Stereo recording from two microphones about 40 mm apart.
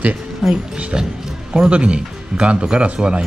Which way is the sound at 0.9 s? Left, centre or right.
Right.